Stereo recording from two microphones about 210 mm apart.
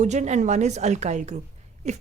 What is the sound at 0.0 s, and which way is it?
Speech, 35° right (ahead or behind).